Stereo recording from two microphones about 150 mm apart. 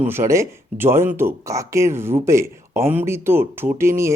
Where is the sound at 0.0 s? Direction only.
15° right (ahead or behind).